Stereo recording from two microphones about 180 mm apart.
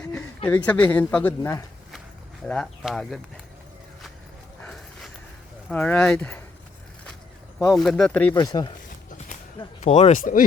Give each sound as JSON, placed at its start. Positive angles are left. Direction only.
{"t": 0.4, "sound": "speech", "side_deg": 10}
{"t": 2.4, "sound": "speech", "side_deg": 5}
{"t": 4.6, "sound": "dog", "side_deg": 0}
{"t": 5.6, "sound": "speech", "side_deg": 10}
{"t": 7.6, "sound": "speech", "side_deg": 0}
{"t": 8.4, "sound": "speech", "side_deg": 20}
{"t": 9.8, "sound": "speech", "side_deg": 40}